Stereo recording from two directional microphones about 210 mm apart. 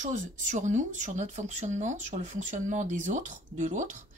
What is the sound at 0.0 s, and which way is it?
Speech, 35° right (ahead or behind).